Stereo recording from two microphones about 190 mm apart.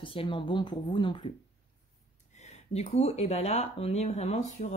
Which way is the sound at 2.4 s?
35° left (ahead or behind).